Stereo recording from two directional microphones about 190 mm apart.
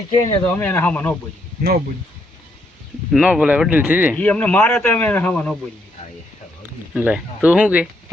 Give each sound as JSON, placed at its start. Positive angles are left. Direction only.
{"t": 0.1, "sound": "speech", "side_deg": 25}
{"t": 0.4, "sound": "a man's voice", "side_deg": 10}
{"t": 3.1, "sound": "speech", "side_deg": -5}
{"t": 4.2, "sound": "a man's voice", "side_deg": 5}
{"t": 6.9, "sound": "speech", "side_deg": -5}